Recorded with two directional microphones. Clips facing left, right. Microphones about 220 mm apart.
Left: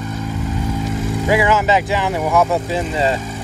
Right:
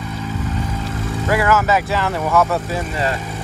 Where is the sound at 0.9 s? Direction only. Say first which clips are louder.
Left 3 dB; 15° left (ahead or behind).